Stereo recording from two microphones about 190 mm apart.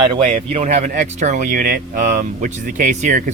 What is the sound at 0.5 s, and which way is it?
Speech, 40° right (ahead or behind).